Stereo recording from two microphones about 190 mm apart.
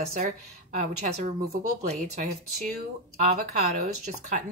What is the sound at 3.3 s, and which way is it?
A woman's voice, 40° right (ahead or behind).